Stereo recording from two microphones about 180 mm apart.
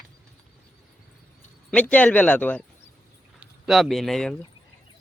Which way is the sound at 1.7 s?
10° left (ahead or behind).